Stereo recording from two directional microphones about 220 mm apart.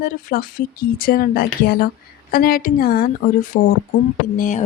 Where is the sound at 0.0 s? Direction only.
40° left (ahead or behind).